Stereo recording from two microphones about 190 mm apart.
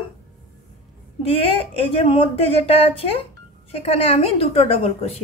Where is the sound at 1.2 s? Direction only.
30° left (ahead or behind).